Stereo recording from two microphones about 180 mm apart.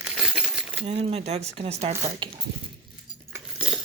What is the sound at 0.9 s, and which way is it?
Speech, 35° right (ahead or behind).